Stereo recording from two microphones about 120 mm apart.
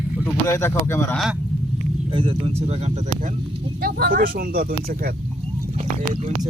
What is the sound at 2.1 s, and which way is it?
Speech, 45° right (ahead or behind).